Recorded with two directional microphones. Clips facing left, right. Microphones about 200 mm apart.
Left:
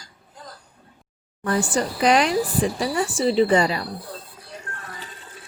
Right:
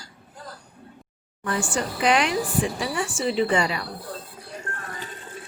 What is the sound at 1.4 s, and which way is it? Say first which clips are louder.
A woman's voice: left 4 dB; 40° left (ahead or behind).